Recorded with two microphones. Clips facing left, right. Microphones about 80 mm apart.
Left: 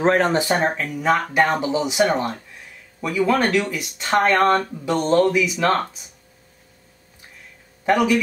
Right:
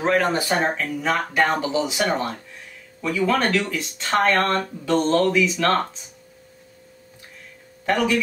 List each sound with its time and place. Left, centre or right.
0.0 s speech: left
0.7 s speech: centre
7.8 s speech: centre